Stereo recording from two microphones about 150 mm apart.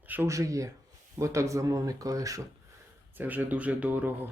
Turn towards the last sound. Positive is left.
turn(degrees=-10)  # may be behind; listen again after turning